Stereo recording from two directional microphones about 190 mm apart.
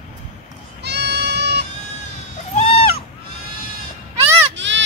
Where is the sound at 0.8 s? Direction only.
60° right (ahead or behind).